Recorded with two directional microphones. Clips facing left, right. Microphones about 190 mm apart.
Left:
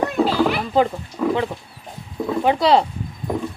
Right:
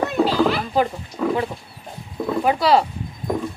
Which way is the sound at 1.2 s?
5° left (ahead or behind).